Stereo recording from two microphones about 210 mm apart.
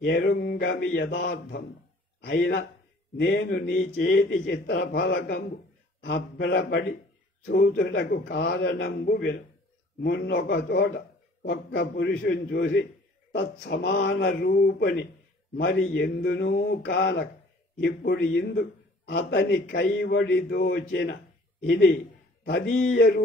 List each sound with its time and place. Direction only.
0.0 s a man's voice: 55° left (ahead or behind)
22.4 s speech: 55° left (ahead or behind)